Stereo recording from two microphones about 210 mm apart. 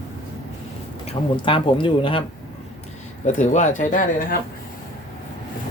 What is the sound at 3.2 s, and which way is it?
Speech, 35° left (ahead or behind).